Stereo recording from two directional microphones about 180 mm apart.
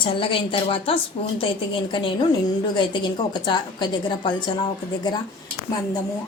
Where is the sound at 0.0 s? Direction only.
30° left (ahead or behind).